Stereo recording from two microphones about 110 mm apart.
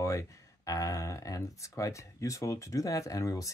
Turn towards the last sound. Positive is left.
turn(degrees=30)  # may be behind; listen again after turning